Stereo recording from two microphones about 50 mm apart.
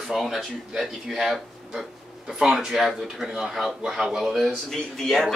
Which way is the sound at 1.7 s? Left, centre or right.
Centre.